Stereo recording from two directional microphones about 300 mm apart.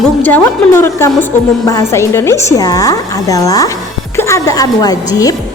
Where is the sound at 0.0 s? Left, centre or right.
Centre.